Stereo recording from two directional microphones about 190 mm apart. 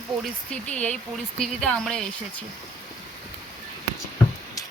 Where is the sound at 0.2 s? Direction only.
5° left (ahead or behind).